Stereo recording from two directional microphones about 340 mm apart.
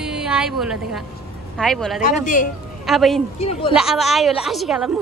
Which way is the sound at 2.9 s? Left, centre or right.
Centre.